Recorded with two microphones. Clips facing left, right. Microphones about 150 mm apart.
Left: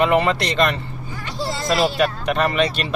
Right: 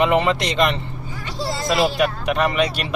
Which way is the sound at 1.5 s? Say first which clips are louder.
Even; centre (ahead or behind).